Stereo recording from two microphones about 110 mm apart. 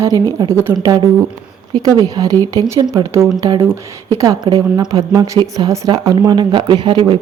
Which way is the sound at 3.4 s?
45° right (ahead or behind).